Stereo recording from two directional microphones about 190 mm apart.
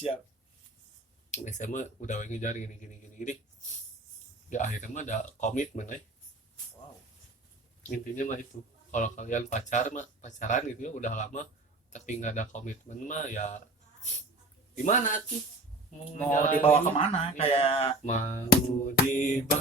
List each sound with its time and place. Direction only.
1.3 s speech: 40° left (ahead or behind)
4.4 s speech: 40° left (ahead or behind)
7.9 s speech: 45° left (ahead or behind)
14.8 s speech: 45° left (ahead or behind)
16.6 s speech: 30° left (ahead or behind)